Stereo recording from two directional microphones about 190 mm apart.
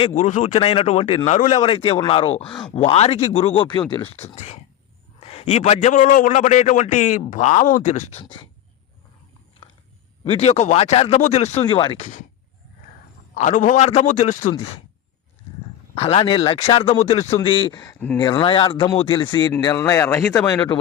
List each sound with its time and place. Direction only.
0.0 s a man's voice: 40° left (ahead or behind)
10.2 s a man's voice: 30° left (ahead or behind)
13.3 s a man's voice: 45° left (ahead or behind)
16.0 s speech: 30° left (ahead or behind); by 20.7 s 10° left (ahead or behind)